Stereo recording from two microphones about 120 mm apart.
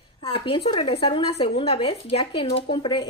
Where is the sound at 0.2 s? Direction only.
50° left (ahead or behind).